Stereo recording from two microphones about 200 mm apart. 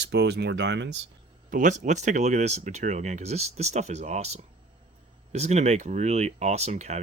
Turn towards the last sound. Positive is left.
turn(degrees=-35)  # may be behind; listen again after turning